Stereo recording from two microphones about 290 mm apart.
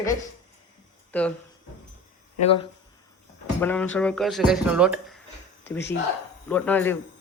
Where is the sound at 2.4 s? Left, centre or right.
Centre.